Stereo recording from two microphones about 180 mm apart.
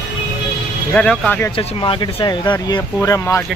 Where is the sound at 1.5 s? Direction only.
30° left (ahead or behind); by 3.5 s 15° left (ahead or behind).